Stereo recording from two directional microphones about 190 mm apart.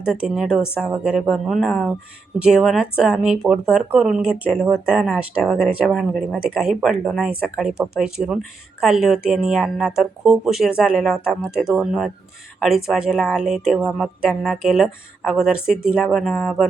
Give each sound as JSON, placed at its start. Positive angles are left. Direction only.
{"t": 0.0, "sound": "a woman's voice", "side_deg": -5}